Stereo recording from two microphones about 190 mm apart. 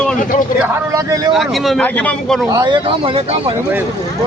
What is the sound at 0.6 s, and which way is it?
Speech, 15° right (ahead or behind).